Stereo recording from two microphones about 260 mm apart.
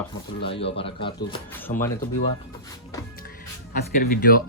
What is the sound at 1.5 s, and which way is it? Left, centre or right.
Speech, centre.